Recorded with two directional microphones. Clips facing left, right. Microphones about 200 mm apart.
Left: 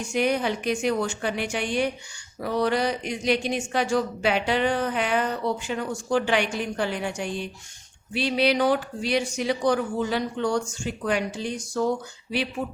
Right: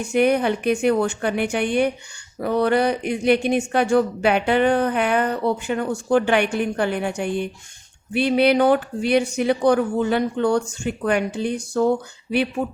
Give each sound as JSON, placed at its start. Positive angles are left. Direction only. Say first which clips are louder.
{"t": 0.0, "sound": "speech", "louder": "right 6 dB", "side_deg": -60}